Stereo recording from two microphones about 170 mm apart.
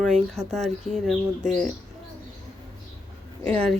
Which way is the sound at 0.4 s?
20° right (ahead or behind).